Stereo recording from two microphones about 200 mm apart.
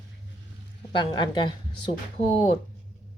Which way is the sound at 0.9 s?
25° left (ahead or behind).